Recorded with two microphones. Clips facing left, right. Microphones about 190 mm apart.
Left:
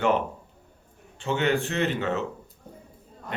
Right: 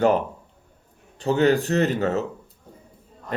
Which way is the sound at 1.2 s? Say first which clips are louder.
Right 6 dB; 40° right (ahead or behind).